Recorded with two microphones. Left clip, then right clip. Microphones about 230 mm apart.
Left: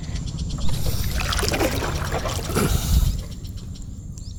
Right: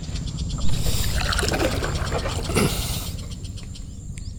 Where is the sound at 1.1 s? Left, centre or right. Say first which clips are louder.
Left 1 dB; centre.